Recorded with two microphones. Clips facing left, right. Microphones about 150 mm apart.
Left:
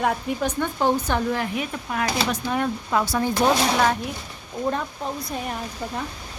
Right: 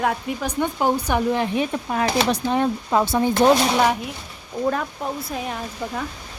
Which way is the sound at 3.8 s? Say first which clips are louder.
Right 2 dB; 5° right (ahead or behind).